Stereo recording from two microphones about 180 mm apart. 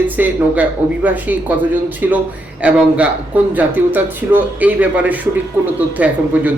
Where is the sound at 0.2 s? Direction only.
10° right (ahead or behind).